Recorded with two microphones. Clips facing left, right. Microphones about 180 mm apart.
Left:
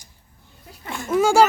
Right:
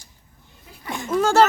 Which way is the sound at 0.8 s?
15° right (ahead or behind).